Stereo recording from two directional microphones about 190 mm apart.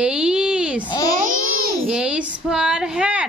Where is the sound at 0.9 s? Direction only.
20° left (ahead or behind).